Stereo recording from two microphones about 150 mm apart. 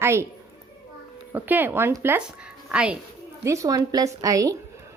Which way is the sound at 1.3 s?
10° right (ahead or behind).